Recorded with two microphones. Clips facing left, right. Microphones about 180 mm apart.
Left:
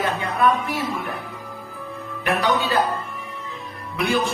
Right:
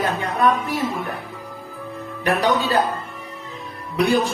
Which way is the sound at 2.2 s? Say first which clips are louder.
Right 2 dB; 35° right (ahead or behind).